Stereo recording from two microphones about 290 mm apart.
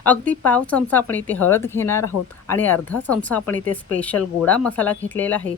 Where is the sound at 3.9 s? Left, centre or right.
Centre.